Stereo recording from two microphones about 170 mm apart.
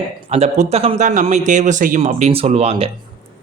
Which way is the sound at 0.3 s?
40° right (ahead or behind).